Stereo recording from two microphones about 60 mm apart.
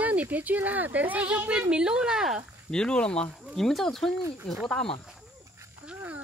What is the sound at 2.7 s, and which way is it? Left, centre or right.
Speech, centre.